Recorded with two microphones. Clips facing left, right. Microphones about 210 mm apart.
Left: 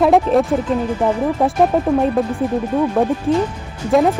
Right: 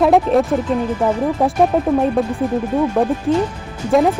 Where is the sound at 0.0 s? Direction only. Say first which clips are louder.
Even; centre (ahead or behind).